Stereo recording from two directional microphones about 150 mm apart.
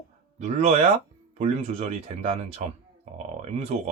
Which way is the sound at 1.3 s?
45° right (ahead or behind).